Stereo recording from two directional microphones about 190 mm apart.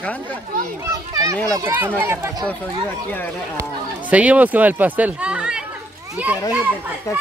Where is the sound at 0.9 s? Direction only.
15° right (ahead or behind).